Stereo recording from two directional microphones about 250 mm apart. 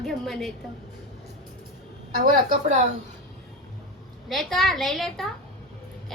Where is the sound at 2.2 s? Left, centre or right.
Right.